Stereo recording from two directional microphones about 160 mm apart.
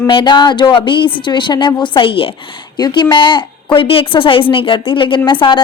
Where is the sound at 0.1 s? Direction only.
30° left (ahead or behind).